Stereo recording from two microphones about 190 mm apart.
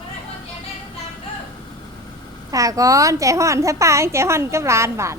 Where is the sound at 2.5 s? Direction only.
15° right (ahead or behind).